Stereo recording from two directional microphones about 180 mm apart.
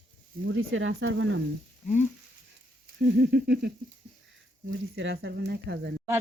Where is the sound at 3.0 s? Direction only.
65° right (ahead or behind).